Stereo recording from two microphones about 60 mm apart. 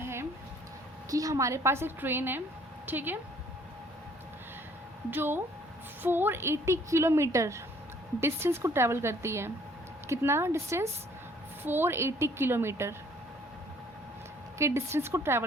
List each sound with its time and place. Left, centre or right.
0.0 s a sound: right
1.1 s a woman's voice: right
5.1 s a woman's voice: right
8.2 s a woman's voice: right
11.6 s a woman's voice: right
14.6 s a woman's voice: right